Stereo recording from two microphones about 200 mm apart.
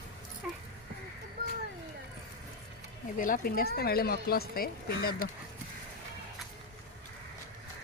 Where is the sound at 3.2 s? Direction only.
45° left (ahead or behind).